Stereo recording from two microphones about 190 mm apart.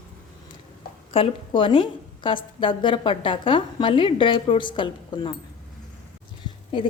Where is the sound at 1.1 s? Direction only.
30° left (ahead or behind).